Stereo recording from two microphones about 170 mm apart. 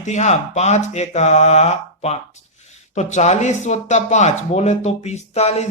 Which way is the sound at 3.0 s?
45° left (ahead or behind).